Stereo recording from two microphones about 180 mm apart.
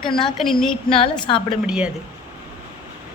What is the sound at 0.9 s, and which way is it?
Speech, 30° left (ahead or behind).